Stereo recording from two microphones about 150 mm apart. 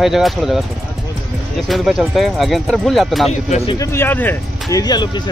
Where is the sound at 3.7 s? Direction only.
20° left (ahead or behind).